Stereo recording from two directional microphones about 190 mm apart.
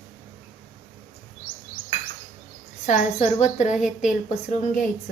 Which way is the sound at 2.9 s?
40° left (ahead or behind).